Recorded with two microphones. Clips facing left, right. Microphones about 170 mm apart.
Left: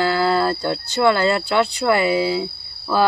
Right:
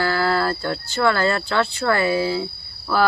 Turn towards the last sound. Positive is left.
turn(degrees=20)  # may be behind; listen again after turning